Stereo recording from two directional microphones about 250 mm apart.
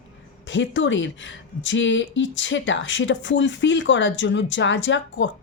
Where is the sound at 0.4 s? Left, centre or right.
Left.